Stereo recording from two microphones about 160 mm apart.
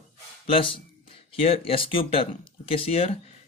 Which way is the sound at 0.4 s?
35° left (ahead or behind).